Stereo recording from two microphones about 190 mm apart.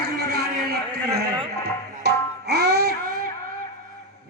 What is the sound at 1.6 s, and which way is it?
Tabla, 60° right (ahead or behind).